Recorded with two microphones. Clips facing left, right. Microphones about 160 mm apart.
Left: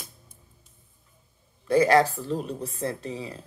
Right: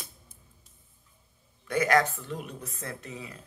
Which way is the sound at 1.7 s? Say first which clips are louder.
Left 5 dB; 30° left (ahead or behind).